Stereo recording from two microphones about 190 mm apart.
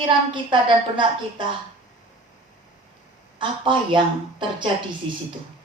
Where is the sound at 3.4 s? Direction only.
25° right (ahead or behind).